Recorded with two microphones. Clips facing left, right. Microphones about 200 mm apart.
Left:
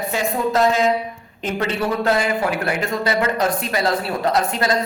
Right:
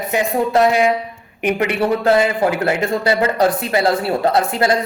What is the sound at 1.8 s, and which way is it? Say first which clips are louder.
A woman's voice: right 5 dB; 25° right (ahead or behind).